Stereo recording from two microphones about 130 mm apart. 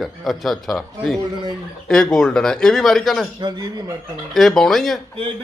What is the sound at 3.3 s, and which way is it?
Speech, 35° right (ahead or behind).